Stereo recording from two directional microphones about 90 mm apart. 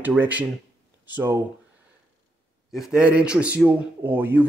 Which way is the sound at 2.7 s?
5° right (ahead or behind).